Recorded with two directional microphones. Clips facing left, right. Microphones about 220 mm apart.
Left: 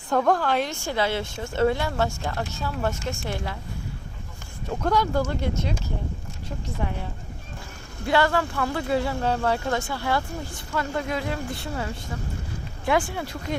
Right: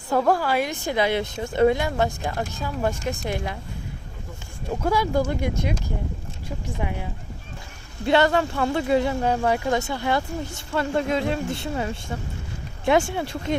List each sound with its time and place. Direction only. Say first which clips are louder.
0.1 s a woman's voice: right 1 dB; 5° right (ahead or behind)
4.8 s a woman's voice: right 1 dB; 10° right (ahead or behind)
6.7 s a woman's voice: even; 10° right (ahead or behind)
8.0 s speech: right 3 dB; 20° right (ahead or behind)